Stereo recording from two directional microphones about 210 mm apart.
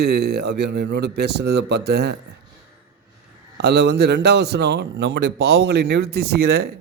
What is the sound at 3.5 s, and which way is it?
A man's voice, 50° right (ahead or behind).